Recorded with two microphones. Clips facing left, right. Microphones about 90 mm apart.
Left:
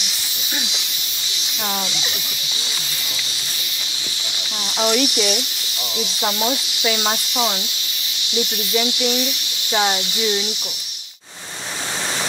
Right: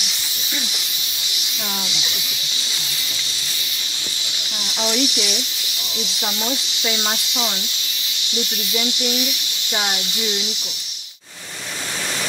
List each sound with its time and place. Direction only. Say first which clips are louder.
4.7 s speech: left 3 dB; 55° left (ahead or behind)
6.8 s speech: left 4 dB; 80° left
9.7 s speech: left 5 dB; 65° left (ahead or behind)